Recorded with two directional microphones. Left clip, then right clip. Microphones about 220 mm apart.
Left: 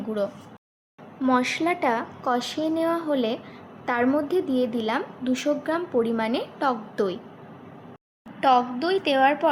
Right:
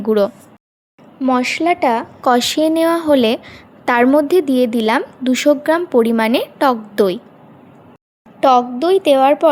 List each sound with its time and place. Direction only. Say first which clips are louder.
1.2 s a woman's voice: right 7 dB; 30° right (ahead or behind)
8.4 s a woman's voice: right 8 dB; 45° right (ahead or behind)